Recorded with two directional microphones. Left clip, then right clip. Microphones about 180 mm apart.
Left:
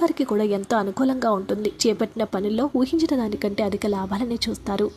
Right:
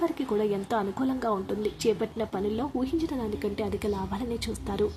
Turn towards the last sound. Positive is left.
turn(degrees=35)  # may be behind; listen again after turning